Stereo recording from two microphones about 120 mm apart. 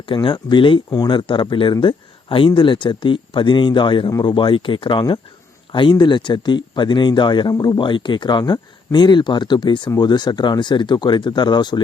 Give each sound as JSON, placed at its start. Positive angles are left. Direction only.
{"t": 0.0, "sound": "speech", "side_deg": 45}